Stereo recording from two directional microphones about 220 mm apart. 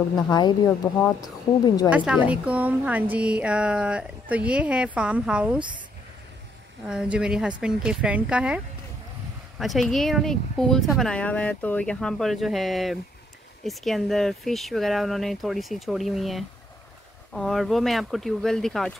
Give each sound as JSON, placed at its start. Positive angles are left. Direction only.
{"t": 0.1, "sound": "speech", "side_deg": 20}
{"t": 1.9, "sound": "a woman's voice", "side_deg": -5}
{"t": 6.9, "sound": "a woman's voice", "side_deg": -5}
{"t": 9.6, "sound": "a woman's voice", "side_deg": 0}